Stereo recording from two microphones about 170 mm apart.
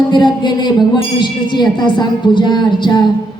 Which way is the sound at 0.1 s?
25° left (ahead or behind).